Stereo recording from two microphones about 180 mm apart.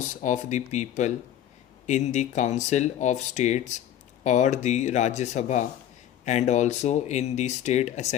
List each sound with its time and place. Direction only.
0.1 s speech: 40° left (ahead or behind)